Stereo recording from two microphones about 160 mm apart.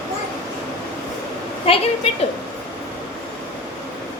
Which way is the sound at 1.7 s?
35° left (ahead or behind).